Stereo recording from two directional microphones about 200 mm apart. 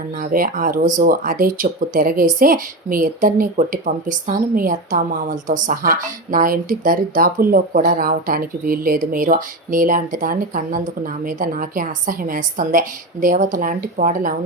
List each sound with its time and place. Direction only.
0.2 s speech: 45° right (ahead or behind)